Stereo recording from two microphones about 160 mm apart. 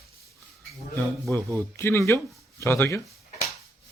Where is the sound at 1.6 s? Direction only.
15° left (ahead or behind).